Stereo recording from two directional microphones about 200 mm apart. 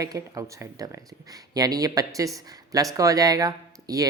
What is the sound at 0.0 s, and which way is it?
Speech, 15° right (ahead or behind).